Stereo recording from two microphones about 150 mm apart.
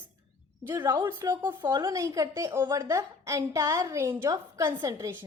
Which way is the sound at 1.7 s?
25° right (ahead or behind).